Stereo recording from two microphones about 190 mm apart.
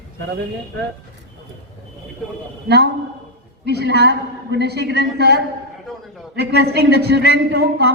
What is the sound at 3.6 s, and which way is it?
A man's voice, 60° right (ahead or behind).